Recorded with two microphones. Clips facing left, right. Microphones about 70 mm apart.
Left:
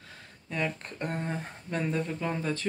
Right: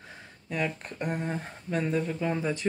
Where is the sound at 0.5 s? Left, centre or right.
Centre.